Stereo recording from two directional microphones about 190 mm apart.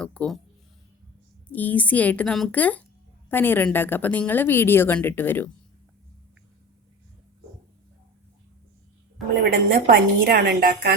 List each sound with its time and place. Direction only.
0.0 s a sound: 5° left (ahead or behind)
1.5 s a woman's voice: 10° left (ahead or behind)
9.4 s a woman's voice: 55° right (ahead or behind)